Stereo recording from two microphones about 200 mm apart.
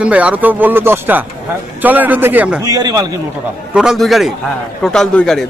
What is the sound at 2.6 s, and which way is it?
Speech, 20° right (ahead or behind).